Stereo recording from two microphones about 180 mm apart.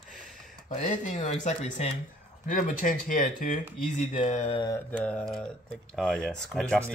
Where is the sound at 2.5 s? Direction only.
50° left (ahead or behind).